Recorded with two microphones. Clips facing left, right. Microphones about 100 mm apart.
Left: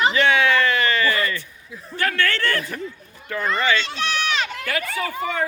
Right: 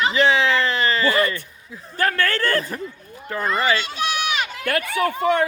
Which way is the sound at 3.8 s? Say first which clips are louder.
Right 1 dB; 10° right (ahead or behind).